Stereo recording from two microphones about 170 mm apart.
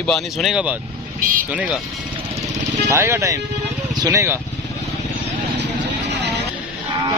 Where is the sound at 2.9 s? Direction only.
15° right (ahead or behind).